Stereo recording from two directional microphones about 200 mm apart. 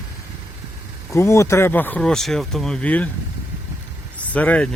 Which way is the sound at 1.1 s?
15° left (ahead or behind).